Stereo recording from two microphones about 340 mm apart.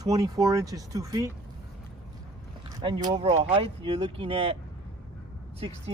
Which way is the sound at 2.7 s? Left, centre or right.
Centre.